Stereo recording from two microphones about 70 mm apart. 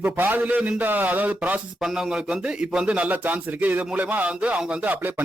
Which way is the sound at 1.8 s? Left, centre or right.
Centre.